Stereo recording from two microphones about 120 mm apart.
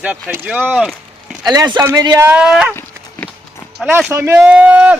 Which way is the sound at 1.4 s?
35° right (ahead or behind).